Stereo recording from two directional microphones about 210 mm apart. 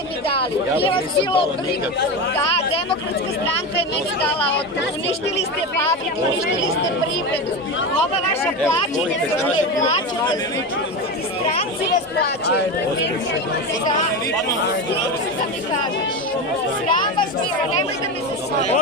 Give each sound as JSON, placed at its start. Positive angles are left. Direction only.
{"t": 0.8, "sound": "speech", "side_deg": 25}
{"t": 12.2, "sound": "speech", "side_deg": 50}